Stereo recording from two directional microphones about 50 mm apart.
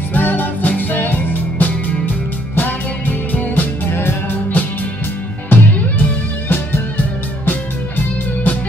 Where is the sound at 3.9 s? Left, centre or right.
Left.